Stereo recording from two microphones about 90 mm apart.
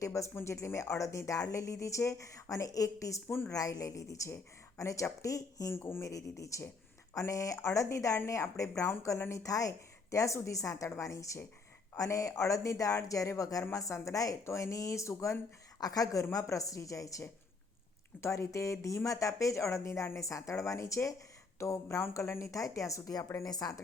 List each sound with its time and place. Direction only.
0.0 s speech: 35° left (ahead or behind)
3.2 s a woman's voice: 25° left (ahead or behind)
3.5 s speech: 40° left (ahead or behind)
5.7 s a woman's voice: 30° left (ahead or behind); by 23.8 s 45° left (ahead or behind)